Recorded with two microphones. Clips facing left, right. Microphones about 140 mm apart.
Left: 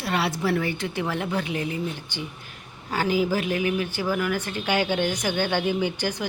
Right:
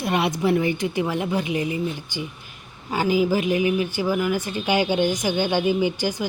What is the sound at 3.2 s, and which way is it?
Speech, 15° right (ahead or behind).